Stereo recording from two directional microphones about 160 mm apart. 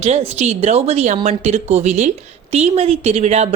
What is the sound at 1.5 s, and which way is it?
Speech, 45° right (ahead or behind).